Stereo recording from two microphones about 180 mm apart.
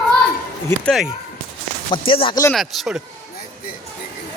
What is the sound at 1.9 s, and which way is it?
Speech, 30° left (ahead or behind).